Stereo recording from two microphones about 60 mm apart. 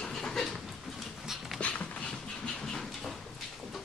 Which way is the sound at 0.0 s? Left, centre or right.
Centre.